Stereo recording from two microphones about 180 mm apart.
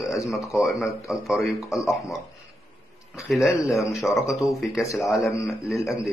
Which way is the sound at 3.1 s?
Centre (ahead or behind).